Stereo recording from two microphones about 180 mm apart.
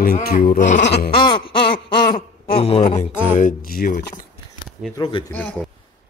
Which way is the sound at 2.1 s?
30° left (ahead or behind).